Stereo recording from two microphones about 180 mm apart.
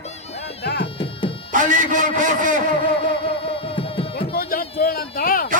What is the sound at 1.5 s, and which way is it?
A man's voice, 45° right (ahead or behind).